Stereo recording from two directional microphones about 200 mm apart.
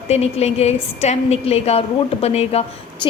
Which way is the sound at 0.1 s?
30° left (ahead or behind).